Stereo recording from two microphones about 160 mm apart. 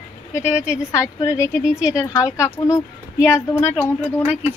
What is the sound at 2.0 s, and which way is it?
Speech, 20° left (ahead or behind).